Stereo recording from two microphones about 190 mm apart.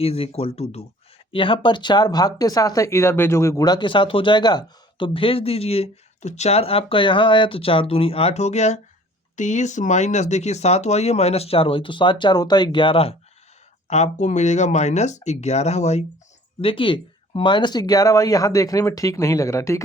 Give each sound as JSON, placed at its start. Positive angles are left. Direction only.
{"t": 0.0, "sound": "speech", "side_deg": 30}